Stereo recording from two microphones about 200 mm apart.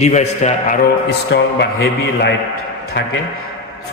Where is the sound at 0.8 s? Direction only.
55° left (ahead or behind).